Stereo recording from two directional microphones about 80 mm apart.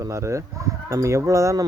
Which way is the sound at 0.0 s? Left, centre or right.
Right.